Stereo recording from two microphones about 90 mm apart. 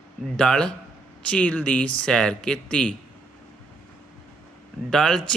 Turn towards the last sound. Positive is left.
turn(degrees=10)  # may be behind; listen again after turning